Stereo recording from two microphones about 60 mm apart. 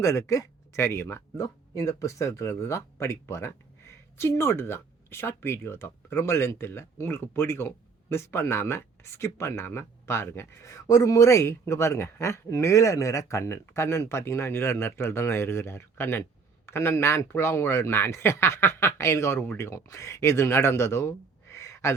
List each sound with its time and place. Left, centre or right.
0.0 s speech: left